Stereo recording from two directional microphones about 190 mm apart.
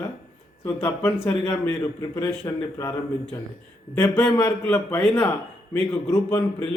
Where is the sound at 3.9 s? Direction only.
15° left (ahead or behind).